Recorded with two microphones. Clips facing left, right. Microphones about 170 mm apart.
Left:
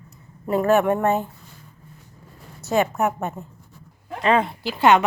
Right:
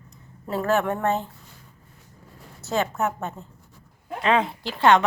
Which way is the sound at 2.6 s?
15° left (ahead or behind).